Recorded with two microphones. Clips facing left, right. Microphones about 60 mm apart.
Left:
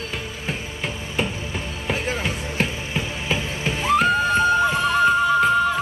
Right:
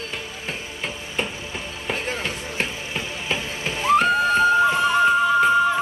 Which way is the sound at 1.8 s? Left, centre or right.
Centre.